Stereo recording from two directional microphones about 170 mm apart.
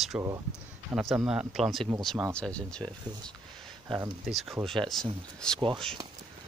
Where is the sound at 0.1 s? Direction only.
10° right (ahead or behind); by 2.9 s 5° left (ahead or behind).